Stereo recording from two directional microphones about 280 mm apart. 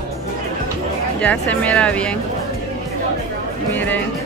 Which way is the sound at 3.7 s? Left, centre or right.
Centre.